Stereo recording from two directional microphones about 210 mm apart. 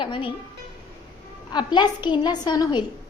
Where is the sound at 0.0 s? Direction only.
25° left (ahead or behind).